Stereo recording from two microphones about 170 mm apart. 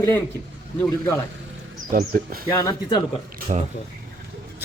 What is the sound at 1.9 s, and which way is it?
Speech, 55° right (ahead or behind).